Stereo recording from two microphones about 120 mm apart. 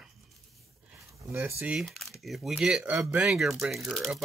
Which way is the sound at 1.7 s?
Centre (ahead or behind).